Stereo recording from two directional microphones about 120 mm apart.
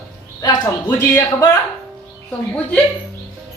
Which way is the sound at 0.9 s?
25° left (ahead or behind).